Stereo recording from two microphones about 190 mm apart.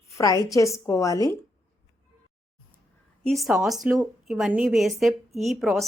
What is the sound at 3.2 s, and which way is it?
Speech, centre (ahead or behind).